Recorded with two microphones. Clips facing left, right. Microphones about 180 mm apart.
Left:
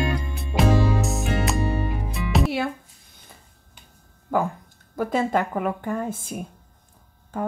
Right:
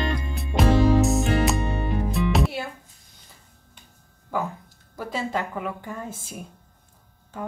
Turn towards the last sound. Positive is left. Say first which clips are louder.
# left 6 dB
turn(degrees=50)  # may be behind; listen again after turning